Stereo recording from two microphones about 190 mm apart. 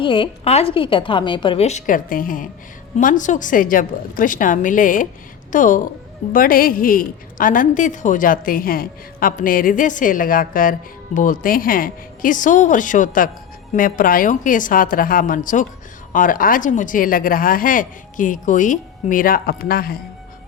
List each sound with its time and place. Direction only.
0.0 s a woman's voice: 25° left (ahead or behind); by 20.0 s 50° left (ahead or behind)